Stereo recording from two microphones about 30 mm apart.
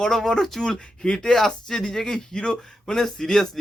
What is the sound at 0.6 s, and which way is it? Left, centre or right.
Speech, left.